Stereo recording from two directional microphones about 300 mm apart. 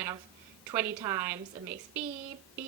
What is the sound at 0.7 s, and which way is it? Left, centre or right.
Speech, centre.